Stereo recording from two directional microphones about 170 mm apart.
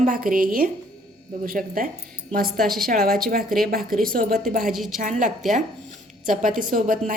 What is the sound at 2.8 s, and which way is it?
A woman's voice, 60° right (ahead or behind).